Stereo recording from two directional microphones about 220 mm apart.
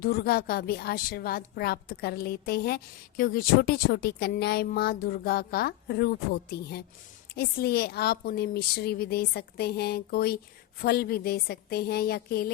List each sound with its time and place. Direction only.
0.0 s a woman's voice: 45° left (ahead or behind)